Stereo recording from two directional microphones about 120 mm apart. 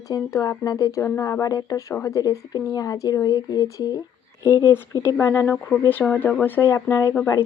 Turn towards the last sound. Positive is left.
turn(degrees=15)  # may be behind; listen again after turning